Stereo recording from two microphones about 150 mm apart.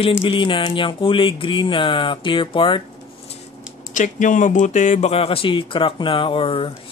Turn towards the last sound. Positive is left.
turn(degrees=35)  # may be behind; listen again after turning